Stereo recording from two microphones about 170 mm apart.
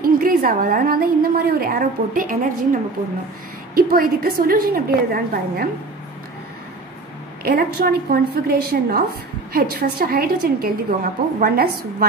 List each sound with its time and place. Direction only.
0.0 s a woman's voice: 60° right (ahead or behind)
7.4 s a woman's voice: 60° right (ahead or behind)